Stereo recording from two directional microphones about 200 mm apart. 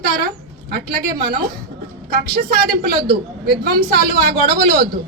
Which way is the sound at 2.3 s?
50° right (ahead or behind).